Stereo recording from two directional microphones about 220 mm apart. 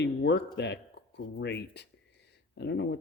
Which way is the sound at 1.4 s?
50° left (ahead or behind).